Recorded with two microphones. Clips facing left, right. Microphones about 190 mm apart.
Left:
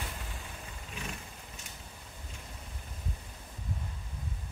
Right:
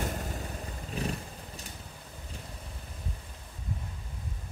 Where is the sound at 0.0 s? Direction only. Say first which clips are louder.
Right 9 dB; 45° right (ahead or behind).